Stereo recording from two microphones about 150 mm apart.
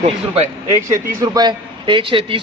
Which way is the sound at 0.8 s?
25° right (ahead or behind).